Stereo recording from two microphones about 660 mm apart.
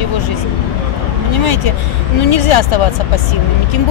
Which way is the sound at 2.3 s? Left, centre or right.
Left.